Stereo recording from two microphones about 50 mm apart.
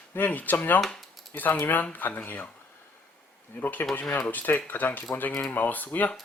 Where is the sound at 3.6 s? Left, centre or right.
Left.